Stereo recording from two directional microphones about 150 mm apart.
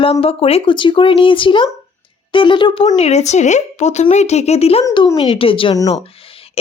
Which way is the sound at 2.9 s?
45° left (ahead or behind).